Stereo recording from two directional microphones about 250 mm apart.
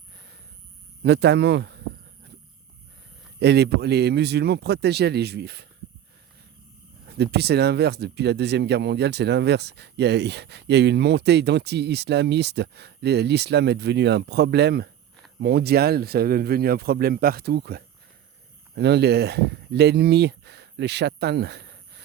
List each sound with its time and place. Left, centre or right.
1.0 s speech: right
3.4 s speech: right
7.1 s speech: right